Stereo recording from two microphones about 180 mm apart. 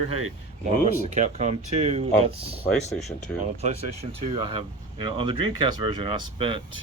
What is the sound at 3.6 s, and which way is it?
Speech, 35° right (ahead or behind).